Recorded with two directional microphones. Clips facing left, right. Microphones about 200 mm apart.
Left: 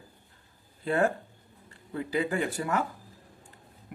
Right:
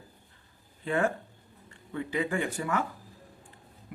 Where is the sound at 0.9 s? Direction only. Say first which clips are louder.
Left 2 dB; 35° left (ahead or behind).